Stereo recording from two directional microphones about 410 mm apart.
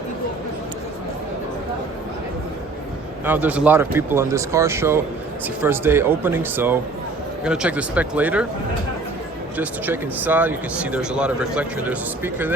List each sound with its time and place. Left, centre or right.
3.2 s speech: centre
9.6 s speech: centre